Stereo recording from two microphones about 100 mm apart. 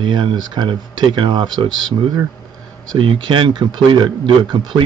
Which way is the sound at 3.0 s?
55° right (ahead or behind).